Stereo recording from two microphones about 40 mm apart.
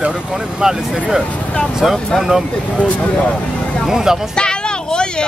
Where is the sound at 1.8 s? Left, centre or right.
Centre.